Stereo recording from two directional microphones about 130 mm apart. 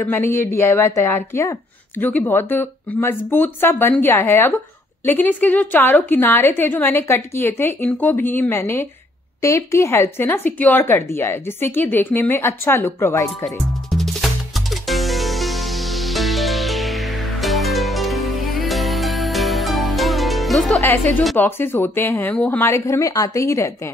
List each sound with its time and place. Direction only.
0.0 s a woman's voice: 15° left (ahead or behind)
13.8 s music: centre (ahead or behind)
20.8 s a woman's voice: 15° left (ahead or behind)